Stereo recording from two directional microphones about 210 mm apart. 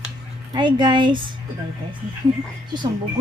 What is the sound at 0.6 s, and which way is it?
Speech, 20° right (ahead or behind).